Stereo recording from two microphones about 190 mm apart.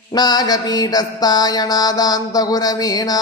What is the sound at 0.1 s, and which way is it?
Mantra, 20° left (ahead or behind).